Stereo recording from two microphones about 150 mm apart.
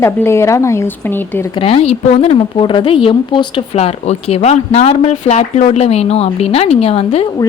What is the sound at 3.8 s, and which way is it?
Speech, 40° left (ahead or behind).